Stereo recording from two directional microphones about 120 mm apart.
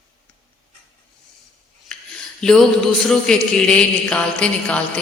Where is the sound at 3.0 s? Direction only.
5° left (ahead or behind).